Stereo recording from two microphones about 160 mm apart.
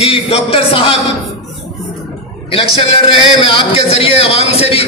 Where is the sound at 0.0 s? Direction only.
40° left (ahead or behind).